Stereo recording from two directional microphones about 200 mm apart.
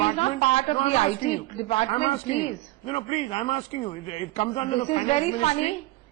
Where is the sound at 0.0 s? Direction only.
30° left (ahead or behind).